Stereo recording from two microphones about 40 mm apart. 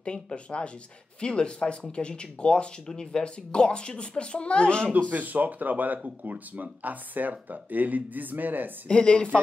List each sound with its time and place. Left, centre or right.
0.0 s speech: left
5.1 s speech: right
8.8 s speech: left